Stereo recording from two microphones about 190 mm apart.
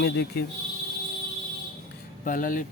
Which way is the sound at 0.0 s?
60° left (ahead or behind).